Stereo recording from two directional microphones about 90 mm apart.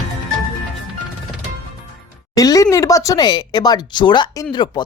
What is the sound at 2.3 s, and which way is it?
A woman's voice, 40° left (ahead or behind).